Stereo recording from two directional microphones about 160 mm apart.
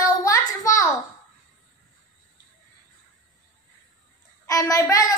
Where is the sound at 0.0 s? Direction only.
20° left (ahead or behind).